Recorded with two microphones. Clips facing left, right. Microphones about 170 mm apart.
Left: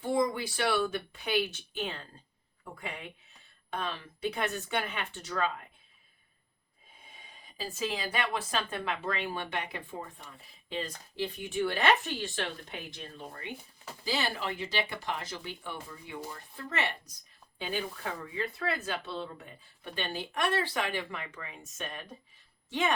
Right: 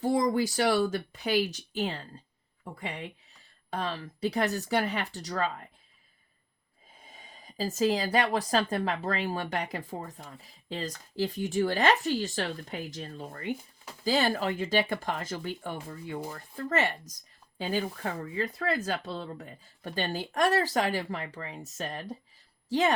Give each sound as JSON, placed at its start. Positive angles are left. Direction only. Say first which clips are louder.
{"t": 0.0, "sound": "speech", "louder": "right 4 dB", "side_deg": -40}
{"t": 7.1, "sound": "speech", "louder": "right 4 dB", "side_deg": -40}